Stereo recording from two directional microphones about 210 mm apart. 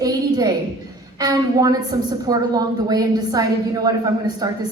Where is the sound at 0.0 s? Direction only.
20° right (ahead or behind).